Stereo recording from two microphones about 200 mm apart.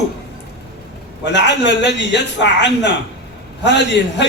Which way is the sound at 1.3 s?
60° left (ahead or behind).